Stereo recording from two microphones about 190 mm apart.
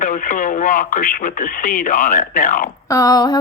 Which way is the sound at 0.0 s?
45° left (ahead or behind).